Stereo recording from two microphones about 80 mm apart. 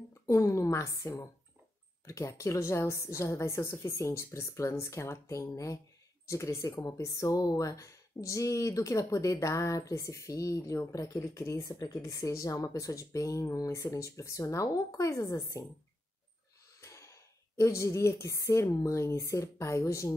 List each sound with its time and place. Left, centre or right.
0.3 s speech: left
16.8 s speech: left